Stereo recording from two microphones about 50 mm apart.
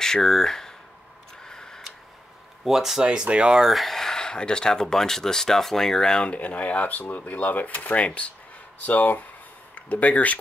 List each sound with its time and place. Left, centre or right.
0.0 s speech: centre
1.4 s a sound: centre
2.6 s speech: centre
3.0 s speech: centre
3.6 s speech: centre
6.2 s speech: left